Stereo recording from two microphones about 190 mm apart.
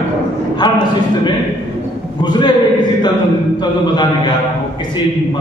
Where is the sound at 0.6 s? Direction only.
20° left (ahead or behind).